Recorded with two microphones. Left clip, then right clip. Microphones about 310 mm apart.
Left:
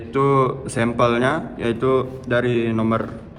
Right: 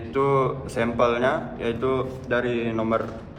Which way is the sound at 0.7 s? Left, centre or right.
Left.